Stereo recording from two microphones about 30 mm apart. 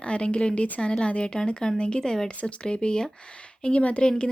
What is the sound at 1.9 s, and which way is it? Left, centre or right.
Speech, left.